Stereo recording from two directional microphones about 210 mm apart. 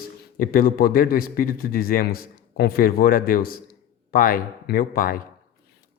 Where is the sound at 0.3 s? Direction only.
45° left (ahead or behind).